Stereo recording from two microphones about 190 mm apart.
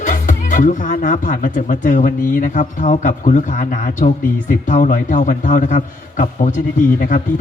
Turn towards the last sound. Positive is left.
turn(degrees=45)  # may be behind; listen again after turning